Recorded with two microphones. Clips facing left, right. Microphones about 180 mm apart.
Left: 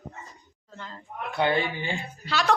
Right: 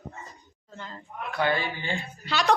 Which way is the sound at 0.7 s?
5° right (ahead or behind).